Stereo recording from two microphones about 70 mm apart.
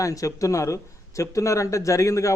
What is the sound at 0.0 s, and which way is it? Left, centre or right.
Speech, left.